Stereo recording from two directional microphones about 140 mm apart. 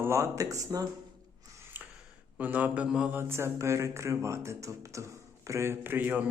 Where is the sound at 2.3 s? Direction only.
10° right (ahead or behind).